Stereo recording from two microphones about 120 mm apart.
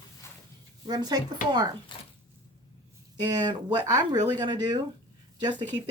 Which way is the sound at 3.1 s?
35° right (ahead or behind).